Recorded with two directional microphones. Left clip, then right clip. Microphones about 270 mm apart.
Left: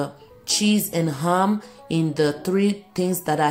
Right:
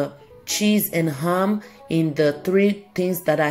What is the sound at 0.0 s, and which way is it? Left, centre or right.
Speech, centre.